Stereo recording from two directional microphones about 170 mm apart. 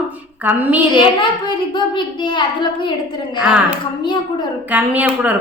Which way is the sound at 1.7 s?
30° left (ahead or behind).